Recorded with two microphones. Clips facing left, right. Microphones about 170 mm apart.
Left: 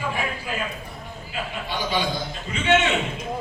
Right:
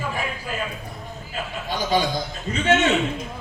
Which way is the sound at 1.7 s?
40° right (ahead or behind).